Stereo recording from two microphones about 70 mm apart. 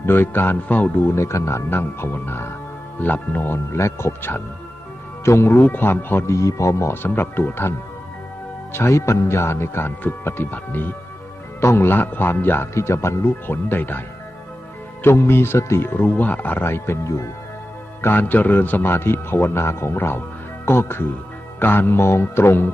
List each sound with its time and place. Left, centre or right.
0.0 s music: left
1.0 s speech: left
1.7 s speech: left
3.0 s music: left
3.8 s speech: left
6.2 s speech: left
6.9 s speech: left
8.7 s speech: left
15.0 s speech: left
18.0 s speech: left